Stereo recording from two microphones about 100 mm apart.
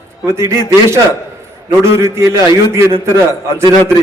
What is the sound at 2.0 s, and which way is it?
A man's voice, 30° right (ahead or behind).